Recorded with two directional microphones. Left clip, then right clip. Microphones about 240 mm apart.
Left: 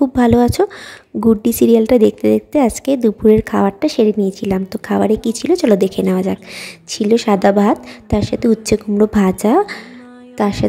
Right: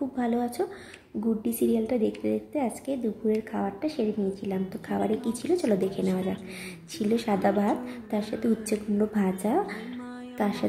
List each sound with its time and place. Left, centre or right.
0.1 s a woman's voice: left